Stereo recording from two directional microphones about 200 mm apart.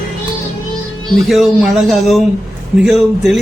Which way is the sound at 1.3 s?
Centre (ahead or behind).